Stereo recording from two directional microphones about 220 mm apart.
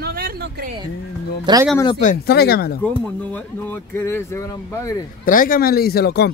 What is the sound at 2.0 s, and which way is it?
Speech, 45° left (ahead or behind).